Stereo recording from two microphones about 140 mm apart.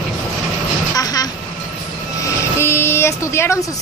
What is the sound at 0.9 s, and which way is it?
Vehicle, 25° left (ahead or behind).